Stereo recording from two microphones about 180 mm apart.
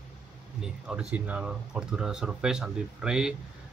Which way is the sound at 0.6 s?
5° right (ahead or behind).